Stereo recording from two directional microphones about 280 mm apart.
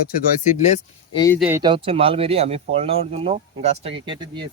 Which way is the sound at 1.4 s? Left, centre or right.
Centre.